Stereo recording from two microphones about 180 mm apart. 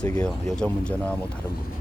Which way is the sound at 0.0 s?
5° left (ahead or behind).